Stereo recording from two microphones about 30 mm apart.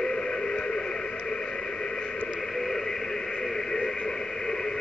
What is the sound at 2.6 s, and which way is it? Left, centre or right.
Radio, centre.